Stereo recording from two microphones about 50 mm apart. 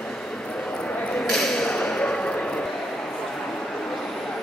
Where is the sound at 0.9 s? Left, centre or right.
Left.